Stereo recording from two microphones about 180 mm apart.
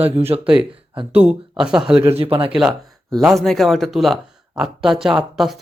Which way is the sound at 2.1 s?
30° right (ahead or behind).